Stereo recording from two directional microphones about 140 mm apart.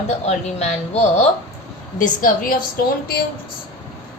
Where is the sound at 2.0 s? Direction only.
90° left.